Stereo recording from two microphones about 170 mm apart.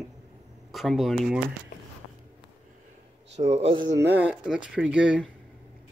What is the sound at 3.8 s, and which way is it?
Speech, 90° right.